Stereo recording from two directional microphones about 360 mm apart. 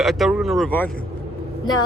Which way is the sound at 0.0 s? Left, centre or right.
Centre.